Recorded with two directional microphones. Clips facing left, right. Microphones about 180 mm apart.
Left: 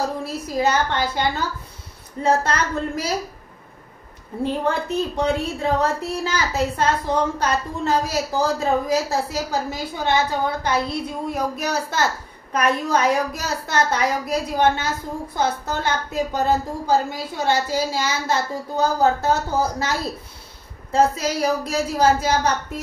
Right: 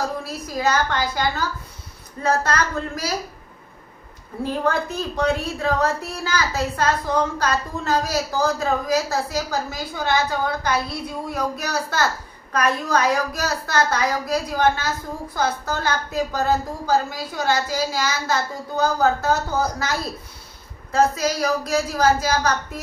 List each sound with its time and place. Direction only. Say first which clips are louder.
0.5 s a woman's voice: left 1 dB; 25° left (ahead or behind)
4.4 s a woman's voice: even; 25° left (ahead or behind)
20.9 s a woman's voice: even; 25° left (ahead or behind)